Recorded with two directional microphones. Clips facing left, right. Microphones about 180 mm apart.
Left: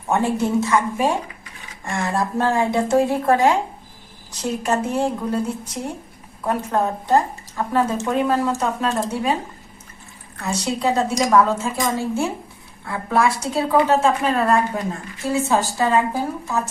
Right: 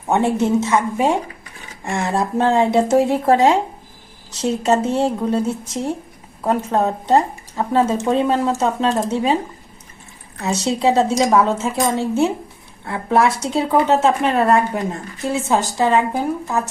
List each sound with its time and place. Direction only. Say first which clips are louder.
0.1 s speech: right 3 dB; 25° right (ahead or behind)
10.4 s a woman's voice: right 4 dB; 25° right (ahead or behind)